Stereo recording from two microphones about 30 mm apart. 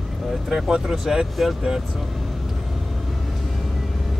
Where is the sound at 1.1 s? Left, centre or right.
Centre.